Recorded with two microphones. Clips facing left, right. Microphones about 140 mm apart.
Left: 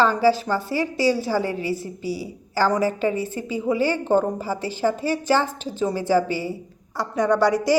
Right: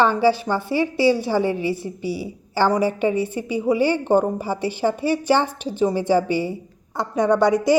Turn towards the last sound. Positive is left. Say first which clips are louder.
# right 2 dB
turn(degrees=-20)  # may be behind; listen again after turning